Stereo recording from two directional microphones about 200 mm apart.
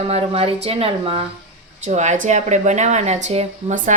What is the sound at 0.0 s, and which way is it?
A woman's voice, 30° right (ahead or behind).